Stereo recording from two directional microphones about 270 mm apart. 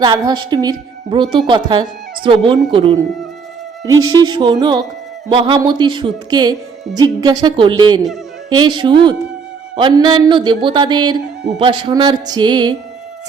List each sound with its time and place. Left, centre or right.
0.0 s a man's voice: centre
4.1 s a man's voice: centre